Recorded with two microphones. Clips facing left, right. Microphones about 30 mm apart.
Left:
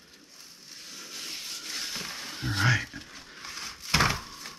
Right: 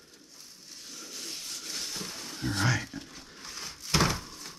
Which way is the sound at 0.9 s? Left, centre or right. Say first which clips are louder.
Left 2 dB; centre.